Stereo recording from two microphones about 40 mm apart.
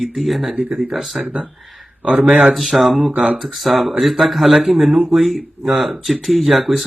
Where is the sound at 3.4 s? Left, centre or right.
Centre.